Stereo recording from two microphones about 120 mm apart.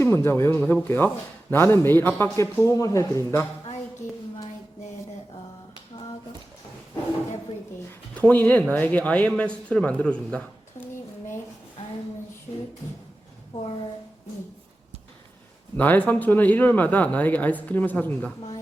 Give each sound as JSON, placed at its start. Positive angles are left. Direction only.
{"t": 0.0, "sound": "speech", "side_deg": 20}
{"t": 8.2, "sound": "speech", "side_deg": 15}
{"t": 15.8, "sound": "speech", "side_deg": 15}